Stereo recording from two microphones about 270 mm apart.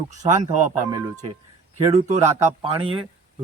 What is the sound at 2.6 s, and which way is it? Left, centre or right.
Speech, centre.